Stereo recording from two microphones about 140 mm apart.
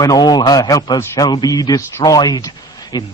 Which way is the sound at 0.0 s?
30° left (ahead or behind).